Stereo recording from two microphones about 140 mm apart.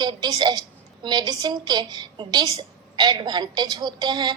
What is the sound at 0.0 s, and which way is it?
A woman's voice, 30° right (ahead or behind).